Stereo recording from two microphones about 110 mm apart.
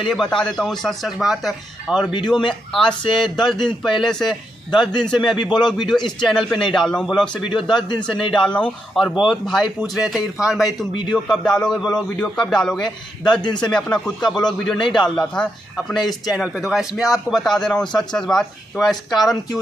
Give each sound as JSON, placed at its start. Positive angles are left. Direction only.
{"t": 0.0, "sound": "a man's voice", "side_deg": 0}
{"t": 5.6, "sound": "speech", "side_deg": 45}
{"t": 5.9, "sound": "a man's voice", "side_deg": 0}
{"t": 9.2, "sound": "a man's voice", "side_deg": 0}
{"t": 11.2, "sound": "a man's voice", "side_deg": 5}